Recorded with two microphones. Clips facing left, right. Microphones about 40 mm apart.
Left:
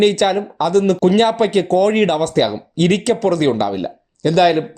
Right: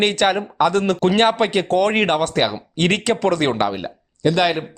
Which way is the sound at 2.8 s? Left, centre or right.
Right.